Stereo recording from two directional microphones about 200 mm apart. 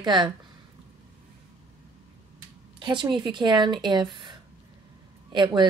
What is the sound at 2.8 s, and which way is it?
A woman's voice, 25° right (ahead or behind).